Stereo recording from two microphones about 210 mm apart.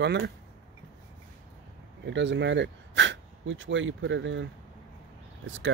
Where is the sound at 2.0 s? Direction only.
55° right (ahead or behind).